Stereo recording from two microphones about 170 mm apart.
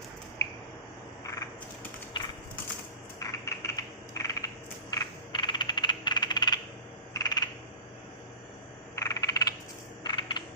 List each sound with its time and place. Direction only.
0.4 s squish: 20° left (ahead or behind)
2.2 s crushing: 30° left (ahead or behind)
3.2 s typing: 20° left (ahead or behind)
4.9 s coin: 25° left (ahead or behind)
7.1 s frog: 20° left (ahead or behind)
9.0 s frog: 20° left (ahead or behind)
10.0 s coin: 30° left (ahead or behind)